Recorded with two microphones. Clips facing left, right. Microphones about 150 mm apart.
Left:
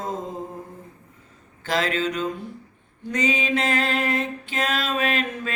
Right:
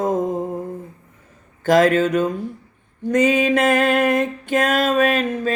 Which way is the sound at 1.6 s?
45° right (ahead or behind).